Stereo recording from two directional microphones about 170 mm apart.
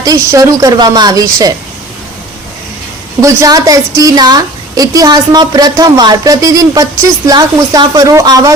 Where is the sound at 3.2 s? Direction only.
20° right (ahead or behind).